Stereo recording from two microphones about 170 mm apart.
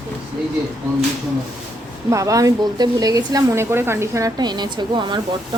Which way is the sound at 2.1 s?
20° right (ahead or behind).